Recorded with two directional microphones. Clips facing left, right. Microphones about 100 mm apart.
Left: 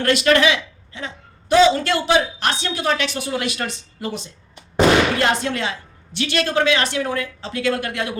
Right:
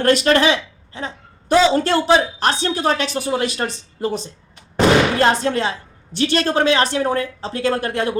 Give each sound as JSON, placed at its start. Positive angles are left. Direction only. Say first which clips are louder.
{"t": 0.0, "sound": "speech", "louder": "right 2 dB", "side_deg": -35}